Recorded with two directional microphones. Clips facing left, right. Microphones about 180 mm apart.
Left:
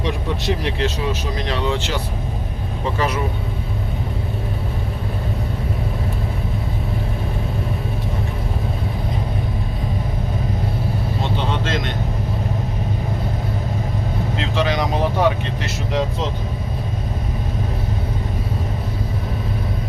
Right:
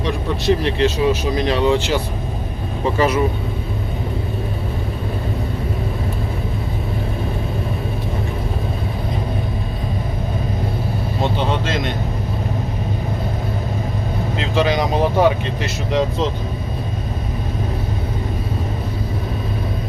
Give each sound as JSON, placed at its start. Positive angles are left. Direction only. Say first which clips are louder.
{"t": 0.0, "sound": "speech", "louder": "right 3 dB", "side_deg": 20}
{"t": 0.8, "sound": "speech", "louder": "right 6 dB", "side_deg": -5}
{"t": 11.6, "sound": "speech", "louder": "right 1 dB", "side_deg": -5}
{"t": 14.3, "sound": "speech", "louder": "right 3 dB", "side_deg": -5}